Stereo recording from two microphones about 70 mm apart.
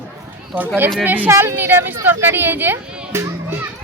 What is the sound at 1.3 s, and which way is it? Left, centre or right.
Speech, right.